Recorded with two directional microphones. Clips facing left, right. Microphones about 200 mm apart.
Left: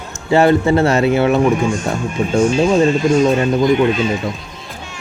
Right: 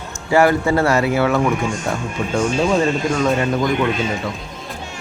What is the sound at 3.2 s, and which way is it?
Speech, 20° left (ahead or behind).